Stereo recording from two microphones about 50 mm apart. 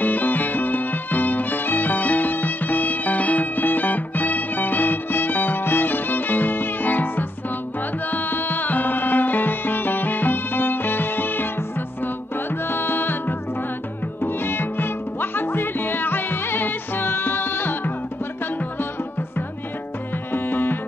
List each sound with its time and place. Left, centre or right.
0.0 s music: left
12.4 s music: left
20.3 s music: left